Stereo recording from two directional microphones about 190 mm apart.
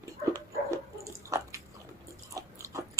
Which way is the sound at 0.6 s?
15° right (ahead or behind).